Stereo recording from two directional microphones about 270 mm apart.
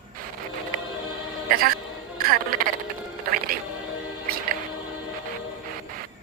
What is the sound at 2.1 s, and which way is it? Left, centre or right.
Speech, right.